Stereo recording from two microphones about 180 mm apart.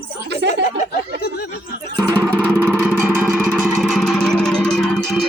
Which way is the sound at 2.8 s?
10° right (ahead or behind).